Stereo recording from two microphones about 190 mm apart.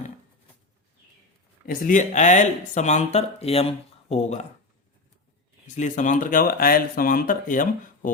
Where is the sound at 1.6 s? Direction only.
45° left (ahead or behind).